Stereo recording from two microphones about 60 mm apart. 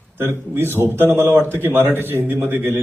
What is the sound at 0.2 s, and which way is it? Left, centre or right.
A man's voice, right.